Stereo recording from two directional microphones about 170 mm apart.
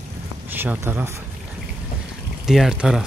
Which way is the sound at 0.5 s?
10° right (ahead or behind).